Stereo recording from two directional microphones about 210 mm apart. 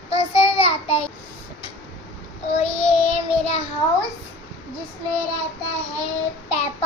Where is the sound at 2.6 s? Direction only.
30° left (ahead or behind).